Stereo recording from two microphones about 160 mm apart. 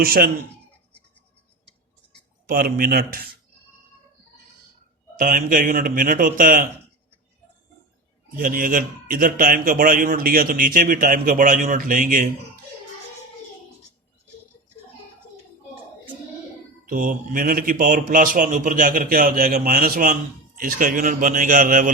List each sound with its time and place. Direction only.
0.0 s a man's voice: 65° right (ahead or behind)
2.5 s a man's voice: 65° right (ahead or behind)
5.1 s a man's voice: 60° right (ahead or behind)
8.4 s a man's voice: 60° right (ahead or behind)
16.8 s a man's voice: 60° right (ahead or behind)